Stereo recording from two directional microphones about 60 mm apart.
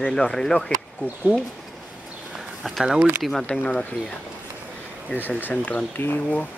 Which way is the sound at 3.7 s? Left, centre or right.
Left.